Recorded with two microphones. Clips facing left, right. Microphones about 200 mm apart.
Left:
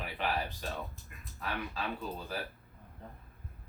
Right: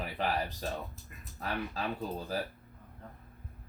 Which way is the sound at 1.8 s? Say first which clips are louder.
Right 2 dB; 40° right (ahead or behind).